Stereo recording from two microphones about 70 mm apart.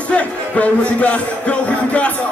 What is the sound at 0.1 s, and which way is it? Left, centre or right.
Music, centre.